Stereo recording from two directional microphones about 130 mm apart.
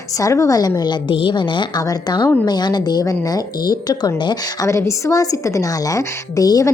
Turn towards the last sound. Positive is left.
turn(degrees=25)  # may be behind; listen again after turning